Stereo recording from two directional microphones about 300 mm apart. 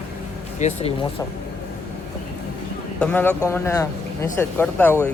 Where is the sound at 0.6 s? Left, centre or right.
Left.